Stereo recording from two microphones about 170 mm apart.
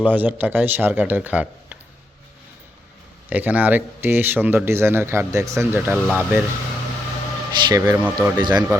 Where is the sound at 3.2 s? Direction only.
10° right (ahead or behind).